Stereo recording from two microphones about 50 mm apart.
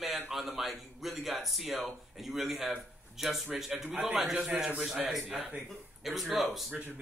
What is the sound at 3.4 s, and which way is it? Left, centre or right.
Speech, right.